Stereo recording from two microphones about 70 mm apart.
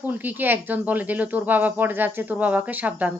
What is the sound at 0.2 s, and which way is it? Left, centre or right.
Speech, right.